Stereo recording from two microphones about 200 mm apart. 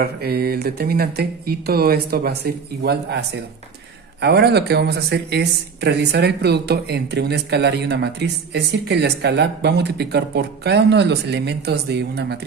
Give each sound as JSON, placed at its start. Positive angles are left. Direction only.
{"t": 0.0, "sound": "speech", "side_deg": -50}